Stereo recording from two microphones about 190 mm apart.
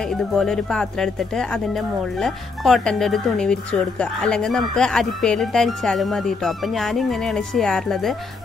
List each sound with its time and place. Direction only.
0.1 s speech: centre (ahead or behind)